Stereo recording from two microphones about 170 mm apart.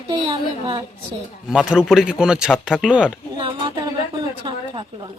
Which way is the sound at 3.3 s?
30° right (ahead or behind).